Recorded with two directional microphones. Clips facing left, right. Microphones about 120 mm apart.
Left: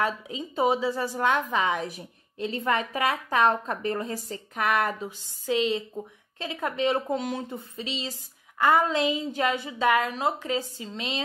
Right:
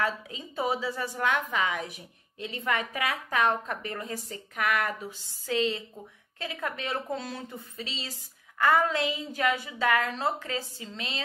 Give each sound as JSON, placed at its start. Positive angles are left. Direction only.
{"t": 0.0, "sound": "a woman's voice", "side_deg": 20}
{"t": 5.5, "sound": "a woman's voice", "side_deg": 20}